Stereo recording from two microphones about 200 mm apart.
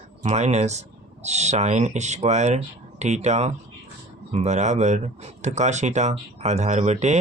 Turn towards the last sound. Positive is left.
turn(degrees=-35)  # may be behind; listen again after turning